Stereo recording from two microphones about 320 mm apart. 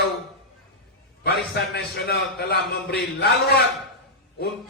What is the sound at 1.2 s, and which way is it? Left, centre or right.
A man's voice, left.